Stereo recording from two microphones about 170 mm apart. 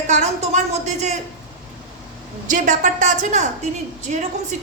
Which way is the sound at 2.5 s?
50° right (ahead or behind).